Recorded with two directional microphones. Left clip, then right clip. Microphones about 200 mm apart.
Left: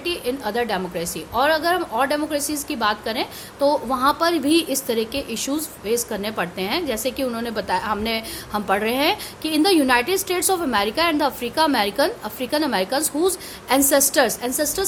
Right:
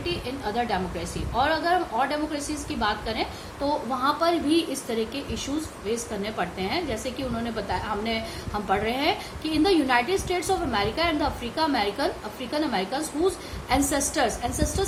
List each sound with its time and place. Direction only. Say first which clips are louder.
0.0 s a woman's voice: left 5 dB; 55° left (ahead or behind)